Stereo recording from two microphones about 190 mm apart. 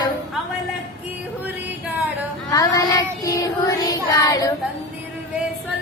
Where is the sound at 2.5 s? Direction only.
20° left (ahead or behind).